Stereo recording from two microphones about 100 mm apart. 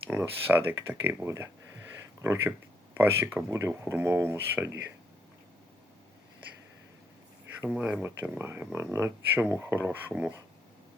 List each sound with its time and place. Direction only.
0.1 s speech: 20° right (ahead or behind)
8.0 s speech: 25° right (ahead or behind)